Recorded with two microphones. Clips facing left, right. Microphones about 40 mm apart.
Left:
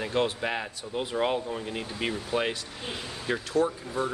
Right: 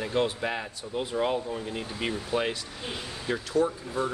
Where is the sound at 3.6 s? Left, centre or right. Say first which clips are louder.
Even; left.